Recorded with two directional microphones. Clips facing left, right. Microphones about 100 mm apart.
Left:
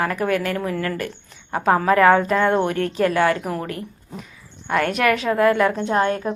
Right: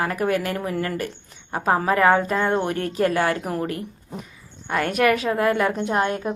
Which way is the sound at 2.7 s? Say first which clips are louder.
Left 2 dB; 40° right (ahead or behind).